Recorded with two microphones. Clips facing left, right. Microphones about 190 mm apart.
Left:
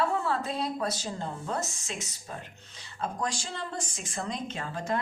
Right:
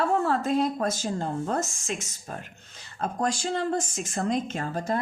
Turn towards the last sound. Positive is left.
turn(degrees=-40)  # may be behind; listen again after turning